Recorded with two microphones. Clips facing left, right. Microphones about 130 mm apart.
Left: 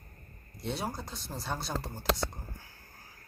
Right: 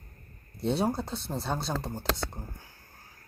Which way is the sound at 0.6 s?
30° right (ahead or behind).